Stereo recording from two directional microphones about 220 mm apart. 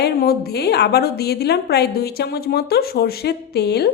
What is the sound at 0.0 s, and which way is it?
A woman's voice, 45° left (ahead or behind).